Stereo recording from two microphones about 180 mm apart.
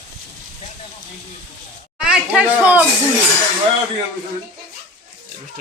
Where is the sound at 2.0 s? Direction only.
5° right (ahead or behind).